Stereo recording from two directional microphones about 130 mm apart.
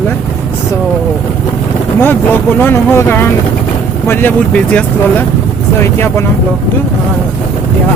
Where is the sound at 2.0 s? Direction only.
15° left (ahead or behind).